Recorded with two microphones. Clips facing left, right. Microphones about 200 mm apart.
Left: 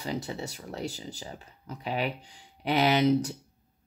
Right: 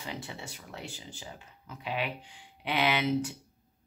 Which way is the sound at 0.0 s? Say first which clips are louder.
Left 7 dB; 40° left (ahead or behind).